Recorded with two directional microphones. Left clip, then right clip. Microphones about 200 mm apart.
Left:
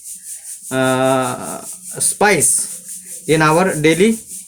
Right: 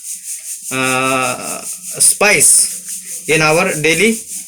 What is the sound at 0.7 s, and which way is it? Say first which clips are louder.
Speech: even; 45° left (ahead or behind).